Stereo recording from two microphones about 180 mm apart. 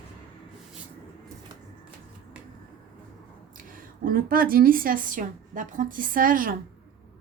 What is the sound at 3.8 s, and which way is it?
A woman's voice, 50° right (ahead or behind).